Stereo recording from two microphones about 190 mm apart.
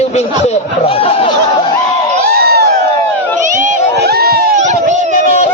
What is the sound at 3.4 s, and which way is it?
Run, 40° right (ahead or behind).